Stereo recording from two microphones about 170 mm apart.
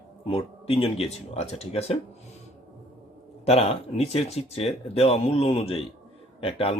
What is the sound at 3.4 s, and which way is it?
Speech, 35° left (ahead or behind).